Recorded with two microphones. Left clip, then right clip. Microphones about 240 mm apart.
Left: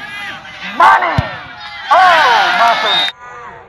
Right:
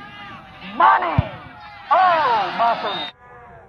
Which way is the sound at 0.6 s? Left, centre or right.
Left.